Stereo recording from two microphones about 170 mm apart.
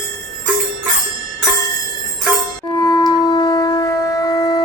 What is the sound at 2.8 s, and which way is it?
Shofar, 25° left (ahead or behind).